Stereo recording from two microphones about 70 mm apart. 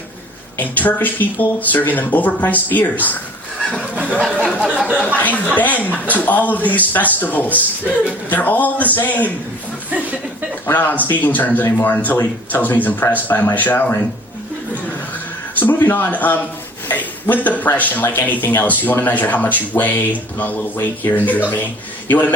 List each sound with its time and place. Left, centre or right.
0.6 s a man's voice: left
3.9 s a sound: right
5.1 s a man's voice: left
10.7 s a man's voice: left
15.5 s a man's voice: left